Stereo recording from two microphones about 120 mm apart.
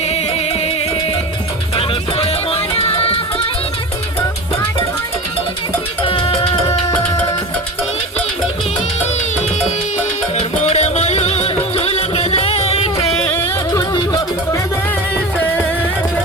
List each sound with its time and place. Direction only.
0.1 s music: 60° left (ahead or behind)
1.7 s music: 50° left (ahead or behind)
6.0 s music: 50° left (ahead or behind)
10.3 s music: 65° left (ahead or behind)
13.1 s music: 15° left (ahead or behind)
13.7 s music: 35° left (ahead or behind)